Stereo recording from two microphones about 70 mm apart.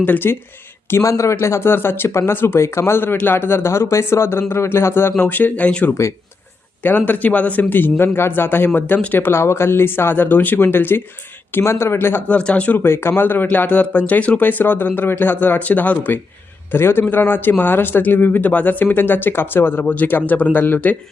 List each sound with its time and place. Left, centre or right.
0.0 s a man's voice: left
1.0 s speech: left
5.2 s a man's voice: left
12.3 s a man's voice: centre